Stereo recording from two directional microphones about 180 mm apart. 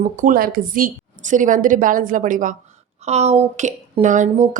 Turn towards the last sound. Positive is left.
turn(degrees=-45)  # may be behind; listen again after turning